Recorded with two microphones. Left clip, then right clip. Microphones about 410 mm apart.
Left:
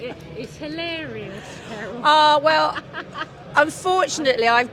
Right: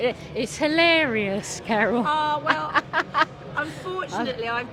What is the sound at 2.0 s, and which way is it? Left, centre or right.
Speech, left.